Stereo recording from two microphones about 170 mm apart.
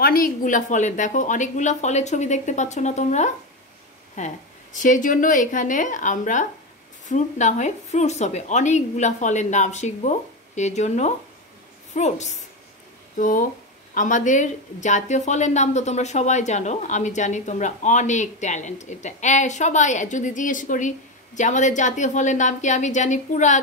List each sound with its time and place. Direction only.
0.0 s speech: 60° left (ahead or behind)